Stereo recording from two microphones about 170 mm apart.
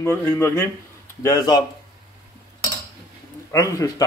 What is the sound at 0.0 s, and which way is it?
Speech, 15° left (ahead or behind).